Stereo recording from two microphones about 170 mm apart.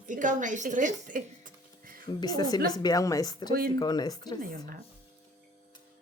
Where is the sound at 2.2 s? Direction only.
25° left (ahead or behind).